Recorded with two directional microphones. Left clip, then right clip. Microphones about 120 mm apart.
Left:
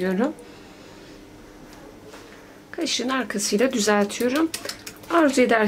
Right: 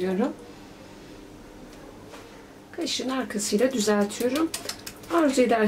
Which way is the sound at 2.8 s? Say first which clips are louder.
Left 4 dB; 30° left (ahead or behind).